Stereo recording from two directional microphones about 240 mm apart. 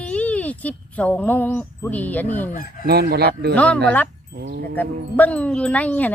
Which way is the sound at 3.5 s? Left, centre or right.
Centre.